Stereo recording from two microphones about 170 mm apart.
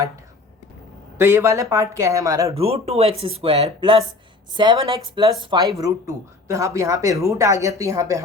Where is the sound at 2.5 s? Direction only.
35° right (ahead or behind).